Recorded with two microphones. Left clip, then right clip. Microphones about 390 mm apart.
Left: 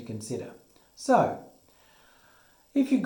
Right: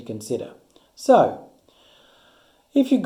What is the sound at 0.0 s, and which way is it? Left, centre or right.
Speech, centre.